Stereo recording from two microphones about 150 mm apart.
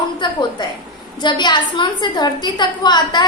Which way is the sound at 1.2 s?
30° left (ahead or behind).